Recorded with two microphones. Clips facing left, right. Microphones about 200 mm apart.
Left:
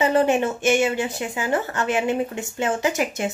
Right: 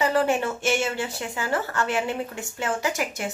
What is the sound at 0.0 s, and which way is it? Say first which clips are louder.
Speech: left 4 dB; 20° left (ahead or behind).